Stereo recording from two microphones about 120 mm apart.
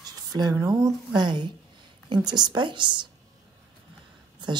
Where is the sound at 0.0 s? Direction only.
30° right (ahead or behind).